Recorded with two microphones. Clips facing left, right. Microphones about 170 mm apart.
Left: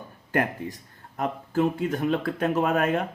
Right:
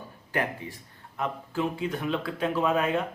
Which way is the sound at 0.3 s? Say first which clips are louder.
Left 4 dB; 45° left (ahead or behind).